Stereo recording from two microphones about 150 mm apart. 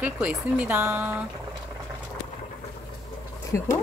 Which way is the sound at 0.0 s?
10° right (ahead or behind).